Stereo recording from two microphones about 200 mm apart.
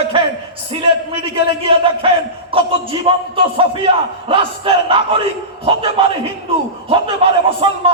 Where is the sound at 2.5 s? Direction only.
25° right (ahead or behind).